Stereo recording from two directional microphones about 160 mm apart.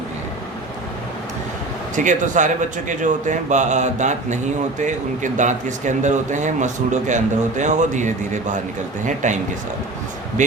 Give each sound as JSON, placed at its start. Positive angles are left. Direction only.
{"t": 2.0, "sound": "speech", "side_deg": -50}